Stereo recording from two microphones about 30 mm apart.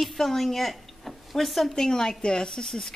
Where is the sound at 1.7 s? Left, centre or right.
Centre.